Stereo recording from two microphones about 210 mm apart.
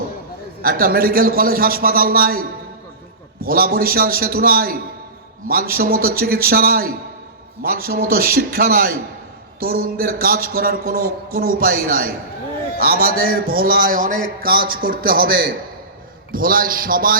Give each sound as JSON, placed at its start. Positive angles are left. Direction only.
{"t": 0.6, "sound": "speech", "side_deg": -45}